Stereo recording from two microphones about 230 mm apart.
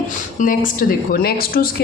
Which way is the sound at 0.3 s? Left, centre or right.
Left.